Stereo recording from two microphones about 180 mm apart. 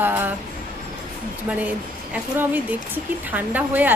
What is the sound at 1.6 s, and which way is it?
A woman's voice, 10° right (ahead or behind).